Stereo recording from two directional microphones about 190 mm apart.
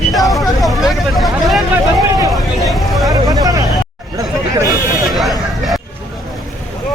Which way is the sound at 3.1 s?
20° right (ahead or behind).